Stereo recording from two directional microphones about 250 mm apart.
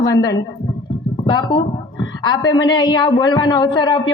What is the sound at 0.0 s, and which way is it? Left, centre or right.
A man's voice, centre.